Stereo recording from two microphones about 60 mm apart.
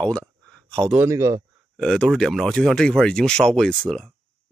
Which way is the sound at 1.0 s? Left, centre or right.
Right.